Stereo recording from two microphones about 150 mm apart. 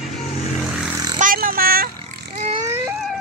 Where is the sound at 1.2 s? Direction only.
70° right (ahead or behind).